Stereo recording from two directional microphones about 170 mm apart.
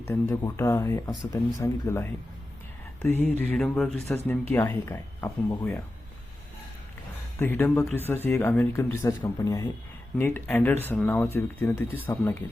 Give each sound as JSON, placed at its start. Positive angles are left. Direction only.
{"t": 0.0, "sound": "speech", "side_deg": 15}
{"t": 7.3, "sound": "speech", "side_deg": 10}